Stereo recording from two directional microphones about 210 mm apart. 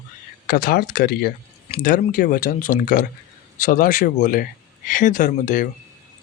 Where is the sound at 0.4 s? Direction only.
45° left (ahead or behind).